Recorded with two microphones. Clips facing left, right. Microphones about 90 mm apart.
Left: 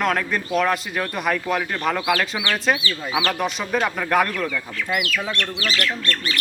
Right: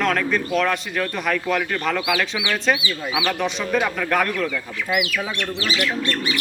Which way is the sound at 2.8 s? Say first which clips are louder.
Even; 10° right (ahead or behind).